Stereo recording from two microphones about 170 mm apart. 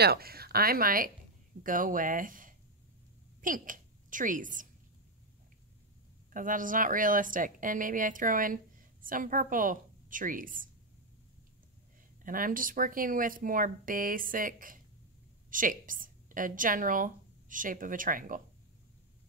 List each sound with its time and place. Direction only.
0.0 s a woman's voice: 65° right (ahead or behind)
6.3 s speech: 55° right (ahead or behind)
12.2 s a woman's voice: 55° right (ahead or behind)